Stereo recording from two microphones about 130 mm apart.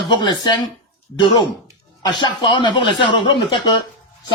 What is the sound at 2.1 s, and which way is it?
A man's voice, 35° left (ahead or behind).